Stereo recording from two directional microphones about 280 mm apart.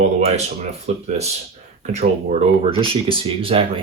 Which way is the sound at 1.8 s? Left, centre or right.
Right.